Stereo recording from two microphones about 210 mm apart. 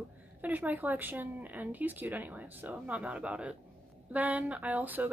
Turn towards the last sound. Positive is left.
turn(degrees=-10)  # may be behind; listen again after turning